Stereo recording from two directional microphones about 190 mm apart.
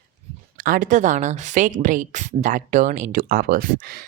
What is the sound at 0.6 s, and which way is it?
Speech, 45° right (ahead or behind).